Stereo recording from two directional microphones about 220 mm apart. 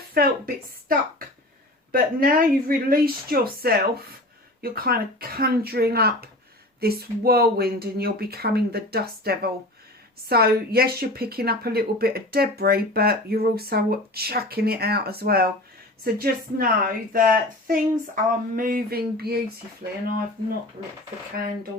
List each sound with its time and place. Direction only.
0.1 s a woman's voice: 40° right (ahead or behind)